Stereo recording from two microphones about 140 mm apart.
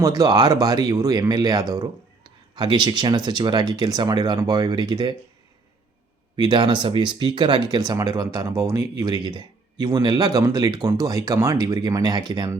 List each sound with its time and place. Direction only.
0.0 s speech: 30° right (ahead or behind)
6.3 s speech: 35° right (ahead or behind)